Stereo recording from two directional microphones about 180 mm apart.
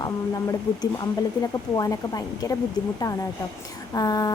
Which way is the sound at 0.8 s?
20° left (ahead or behind).